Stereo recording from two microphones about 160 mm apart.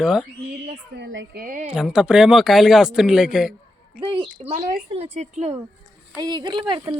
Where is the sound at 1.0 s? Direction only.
70° right (ahead or behind).